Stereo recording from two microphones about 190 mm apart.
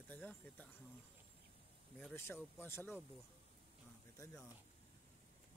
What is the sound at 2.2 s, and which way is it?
Speech, 10° left (ahead or behind).